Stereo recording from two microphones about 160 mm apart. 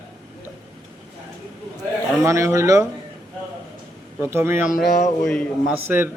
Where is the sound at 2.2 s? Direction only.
20° right (ahead or behind).